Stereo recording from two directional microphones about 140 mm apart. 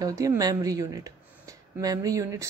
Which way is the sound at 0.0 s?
25° right (ahead or behind).